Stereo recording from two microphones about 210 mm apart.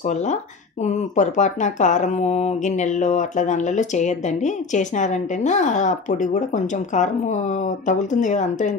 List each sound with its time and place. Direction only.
0.8 s speech: 35° left (ahead or behind)